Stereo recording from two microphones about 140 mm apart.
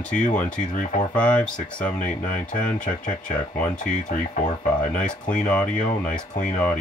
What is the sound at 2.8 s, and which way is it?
Speech, 65° left (ahead or behind).